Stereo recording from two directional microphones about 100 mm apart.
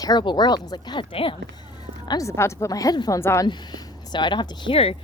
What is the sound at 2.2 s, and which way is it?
Speech, 30° left (ahead or behind).